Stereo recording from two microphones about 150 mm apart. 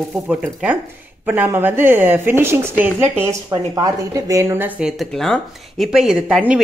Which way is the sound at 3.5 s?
25° right (ahead or behind).